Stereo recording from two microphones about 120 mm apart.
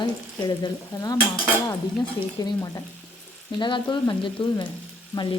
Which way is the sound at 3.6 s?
40° left (ahead or behind).